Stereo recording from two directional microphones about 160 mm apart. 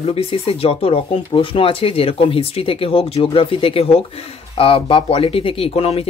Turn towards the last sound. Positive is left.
turn(degrees=40)  # may be behind; listen again after turning